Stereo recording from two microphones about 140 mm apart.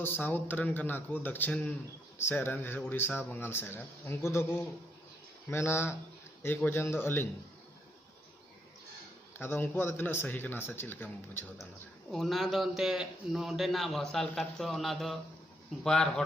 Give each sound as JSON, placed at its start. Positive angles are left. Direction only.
{"t": 0.0, "sound": "speech", "side_deg": 15}
{"t": 9.4, "sound": "speech", "side_deg": 15}
{"t": 12.1, "sound": "a man's voice", "side_deg": 0}